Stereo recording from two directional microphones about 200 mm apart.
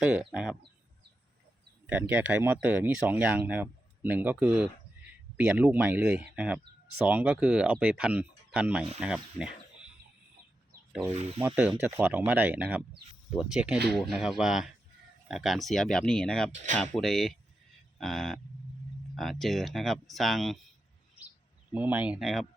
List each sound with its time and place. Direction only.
0.0 s speech: 5° right (ahead or behind)
1.9 s speech: 10° right (ahead or behind)
11.1 s speech: 35° right (ahead or behind)
11.3 s speech: 10° right (ahead or behind)
17.9 s a sound: centre (ahead or behind)
19.1 s speech: centre (ahead or behind)
21.7 s speech: 10° right (ahead or behind)